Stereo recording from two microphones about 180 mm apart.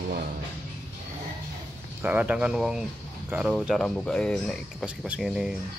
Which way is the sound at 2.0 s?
10° right (ahead or behind).